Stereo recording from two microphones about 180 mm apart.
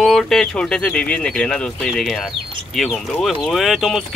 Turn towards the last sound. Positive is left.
turn(degrees=0)  # may be behind; listen again after turning